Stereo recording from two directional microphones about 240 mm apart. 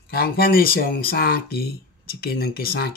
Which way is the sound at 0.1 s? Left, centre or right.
Left.